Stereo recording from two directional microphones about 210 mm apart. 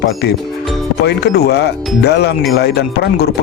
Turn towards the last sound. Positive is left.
turn(degrees=50)  # may be behind; listen again after turning